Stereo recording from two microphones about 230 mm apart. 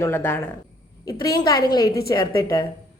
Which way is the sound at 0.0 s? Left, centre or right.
Centre.